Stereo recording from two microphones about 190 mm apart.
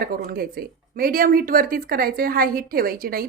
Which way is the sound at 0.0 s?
50° right (ahead or behind).